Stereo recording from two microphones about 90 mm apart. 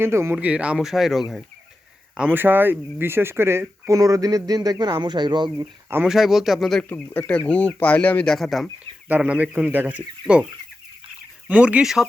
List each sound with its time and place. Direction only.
0.0 s speech: 30° right (ahead or behind)
0.3 s speech: 15° right (ahead or behind)
2.1 s speech: 20° right (ahead or behind); by 5.6 s 55° right (ahead or behind)
6.1 s speech: 5° right (ahead or behind)
6.8 s speech: 20° left (ahead or behind)
8.3 s speech: centre (ahead or behind)
9.2 s speech: 10° right (ahead or behind)
11.4 s speech: 15° right (ahead or behind)